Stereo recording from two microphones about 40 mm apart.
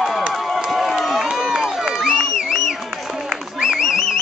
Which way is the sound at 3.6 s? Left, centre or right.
Centre.